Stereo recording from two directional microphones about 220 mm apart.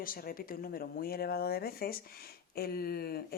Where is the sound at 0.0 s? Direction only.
40° left (ahead or behind).